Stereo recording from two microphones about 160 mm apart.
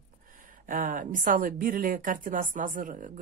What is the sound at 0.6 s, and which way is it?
A woman's voice, 55° right (ahead or behind).